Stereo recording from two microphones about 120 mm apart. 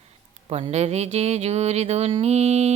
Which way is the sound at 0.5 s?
60° right (ahead or behind).